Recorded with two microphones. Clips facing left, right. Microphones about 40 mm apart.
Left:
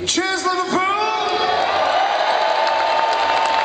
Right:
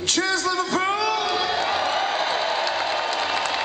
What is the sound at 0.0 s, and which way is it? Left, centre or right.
Music, left.